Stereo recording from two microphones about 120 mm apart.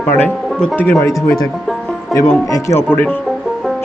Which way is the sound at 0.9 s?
25° left (ahead or behind).